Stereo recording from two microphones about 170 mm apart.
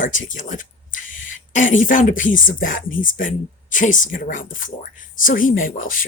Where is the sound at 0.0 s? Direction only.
50° left (ahead or behind).